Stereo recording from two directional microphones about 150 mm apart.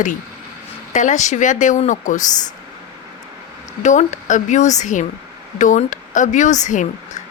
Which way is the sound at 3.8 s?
55° left (ahead or behind).